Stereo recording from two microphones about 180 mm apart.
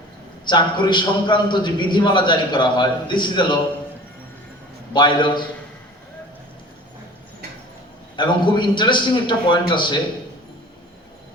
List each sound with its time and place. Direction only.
0.4 s a man's voice: 25° left (ahead or behind)
4.9 s a man's voice: 25° left (ahead or behind)
8.1 s a man's voice: 25° left (ahead or behind)